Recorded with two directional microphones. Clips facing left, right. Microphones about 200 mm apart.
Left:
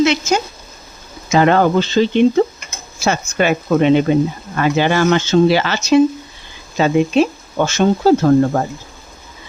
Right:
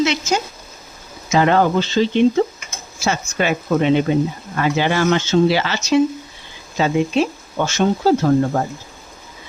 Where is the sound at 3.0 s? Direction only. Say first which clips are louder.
Left 4 dB; 55° left (ahead or behind).